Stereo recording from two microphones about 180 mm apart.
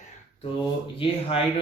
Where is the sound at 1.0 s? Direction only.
30° left (ahead or behind).